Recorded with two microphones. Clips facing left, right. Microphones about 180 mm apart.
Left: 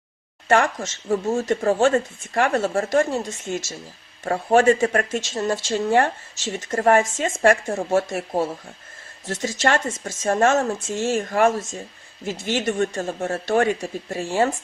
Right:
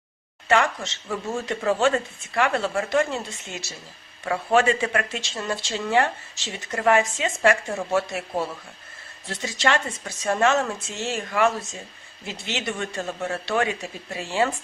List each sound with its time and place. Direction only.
0.4 s speech: 45° left (ahead or behind)